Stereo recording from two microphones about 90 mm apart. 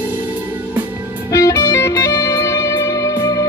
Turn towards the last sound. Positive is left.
turn(degrees=35)  # may be behind; listen again after turning